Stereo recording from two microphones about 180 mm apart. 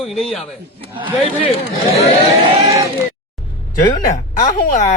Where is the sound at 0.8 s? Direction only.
30° right (ahead or behind).